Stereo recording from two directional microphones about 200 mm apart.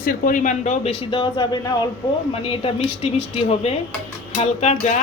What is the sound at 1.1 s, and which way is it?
A woman's voice, 20° left (ahead or behind).